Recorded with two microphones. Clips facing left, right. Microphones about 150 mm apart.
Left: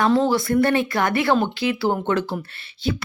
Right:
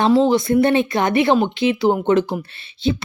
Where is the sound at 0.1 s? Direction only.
20° right (ahead or behind).